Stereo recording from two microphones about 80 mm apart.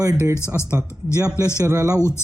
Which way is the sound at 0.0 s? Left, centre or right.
Right.